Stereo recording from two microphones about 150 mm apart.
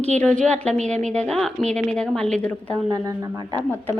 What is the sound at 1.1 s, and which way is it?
Speech, 5° left (ahead or behind).